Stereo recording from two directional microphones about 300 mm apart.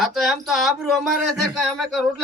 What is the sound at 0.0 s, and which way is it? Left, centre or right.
Speech, centre.